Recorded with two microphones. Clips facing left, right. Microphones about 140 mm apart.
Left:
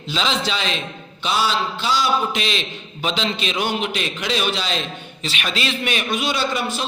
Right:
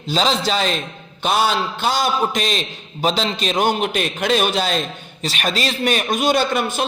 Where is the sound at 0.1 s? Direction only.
40° right (ahead or behind).